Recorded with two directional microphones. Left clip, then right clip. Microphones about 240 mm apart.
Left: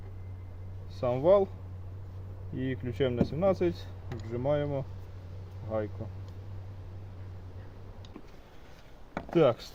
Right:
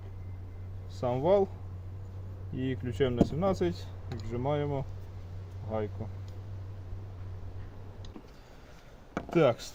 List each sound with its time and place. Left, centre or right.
1.0 s speech: centre
2.6 s speech: centre
9.3 s speech: centre